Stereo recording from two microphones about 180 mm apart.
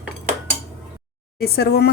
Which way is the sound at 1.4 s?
65° left (ahead or behind).